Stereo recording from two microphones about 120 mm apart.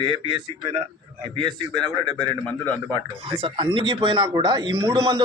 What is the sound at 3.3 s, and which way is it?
A man's voice, 45° right (ahead or behind).